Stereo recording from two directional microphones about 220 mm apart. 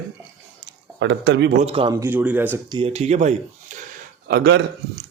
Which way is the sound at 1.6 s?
25° right (ahead or behind).